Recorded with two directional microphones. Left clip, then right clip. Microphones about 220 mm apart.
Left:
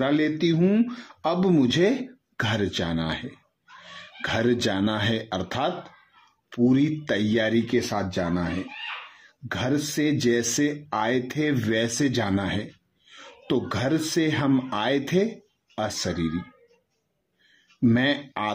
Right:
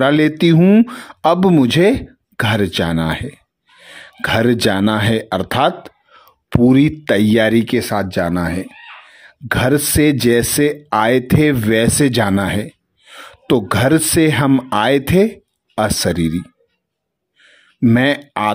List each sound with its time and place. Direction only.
0.0 s speech: 45° right (ahead or behind)
17.8 s speech: 40° right (ahead or behind)